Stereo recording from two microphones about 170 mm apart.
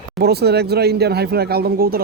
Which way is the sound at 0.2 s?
70° right (ahead or behind).